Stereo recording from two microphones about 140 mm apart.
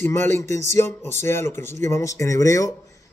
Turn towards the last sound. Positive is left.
turn(degrees=25)  # may be behind; listen again after turning